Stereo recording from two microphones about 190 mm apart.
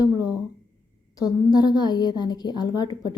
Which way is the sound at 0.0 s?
20° left (ahead or behind).